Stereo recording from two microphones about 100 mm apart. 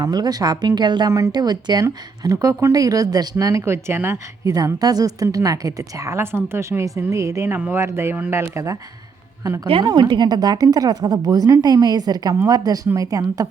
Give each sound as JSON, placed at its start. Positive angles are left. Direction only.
{"t": 0.0, "sound": "a woman's voice", "side_deg": -40}
{"t": 4.4, "sound": "a woman's voice", "side_deg": -35}